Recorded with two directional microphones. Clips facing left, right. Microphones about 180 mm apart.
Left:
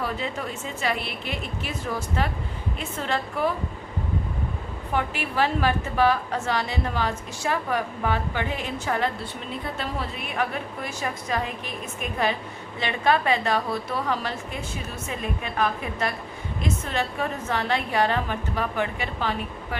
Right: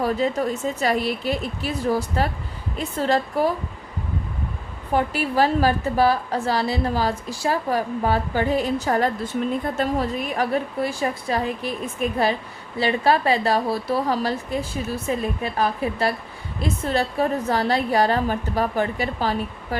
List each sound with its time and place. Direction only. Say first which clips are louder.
0.0 s a woman's voice: right 8 dB; 40° right (ahead or behind)
4.9 s a woman's voice: right 5 dB; 40° right (ahead or behind)